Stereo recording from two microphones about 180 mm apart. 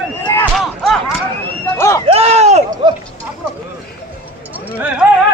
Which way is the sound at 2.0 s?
35° right (ahead or behind).